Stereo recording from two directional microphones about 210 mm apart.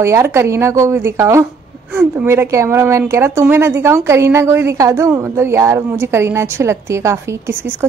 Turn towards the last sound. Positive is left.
turn(degrees=-10)  # may be behind; listen again after turning